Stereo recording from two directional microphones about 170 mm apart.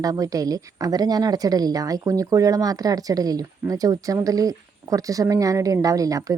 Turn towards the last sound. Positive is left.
turn(degrees=-20)  # may be behind; listen again after turning